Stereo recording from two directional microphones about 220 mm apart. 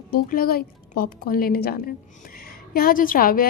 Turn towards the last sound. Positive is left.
turn(degrees=40)  # may be behind; listen again after turning